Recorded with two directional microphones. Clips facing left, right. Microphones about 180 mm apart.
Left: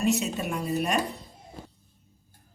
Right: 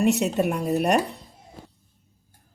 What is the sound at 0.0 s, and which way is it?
Speech, 65° right (ahead or behind).